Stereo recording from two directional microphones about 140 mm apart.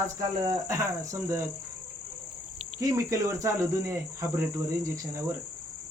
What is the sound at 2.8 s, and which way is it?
Speech, 25° right (ahead or behind).